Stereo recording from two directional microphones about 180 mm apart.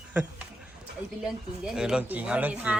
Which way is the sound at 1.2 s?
5° right (ahead or behind).